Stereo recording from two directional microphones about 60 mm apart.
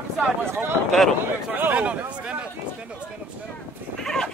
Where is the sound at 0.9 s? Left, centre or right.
Centre.